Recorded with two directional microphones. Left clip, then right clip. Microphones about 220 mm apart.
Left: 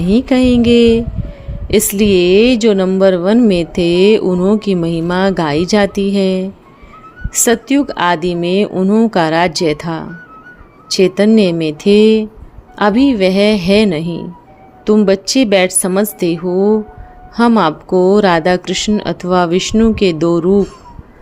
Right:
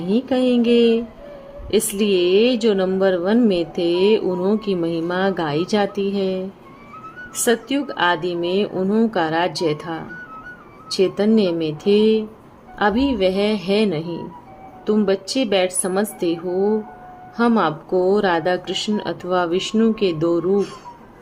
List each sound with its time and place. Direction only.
0.0 s speech: 30° left (ahead or behind)